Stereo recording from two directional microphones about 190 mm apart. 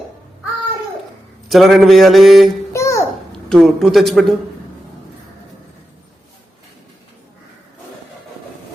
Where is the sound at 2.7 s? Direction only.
15° left (ahead or behind).